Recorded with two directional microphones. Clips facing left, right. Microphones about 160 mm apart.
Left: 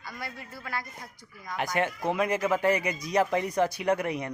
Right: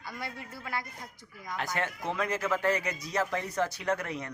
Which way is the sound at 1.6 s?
15° left (ahead or behind).